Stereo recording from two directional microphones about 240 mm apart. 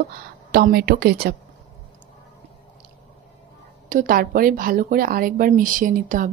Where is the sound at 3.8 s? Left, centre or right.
Right.